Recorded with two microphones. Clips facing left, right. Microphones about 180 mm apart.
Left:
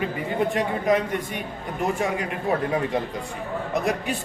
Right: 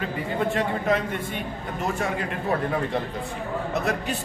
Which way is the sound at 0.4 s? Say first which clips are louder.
Left 1 dB; 15° left (ahead or behind).